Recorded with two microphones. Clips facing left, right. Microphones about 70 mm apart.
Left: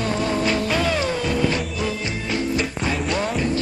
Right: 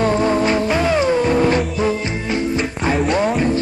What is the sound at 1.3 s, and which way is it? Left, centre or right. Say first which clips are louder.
Music: right 6 dB; right.